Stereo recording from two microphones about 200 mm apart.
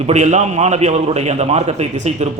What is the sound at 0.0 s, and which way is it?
A man's voice, 35° right (ahead or behind).